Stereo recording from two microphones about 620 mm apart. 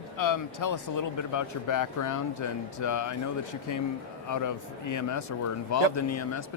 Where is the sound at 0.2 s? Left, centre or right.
Left.